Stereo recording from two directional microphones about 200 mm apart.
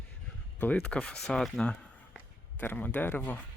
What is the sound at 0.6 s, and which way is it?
Speech, 10° left (ahead or behind).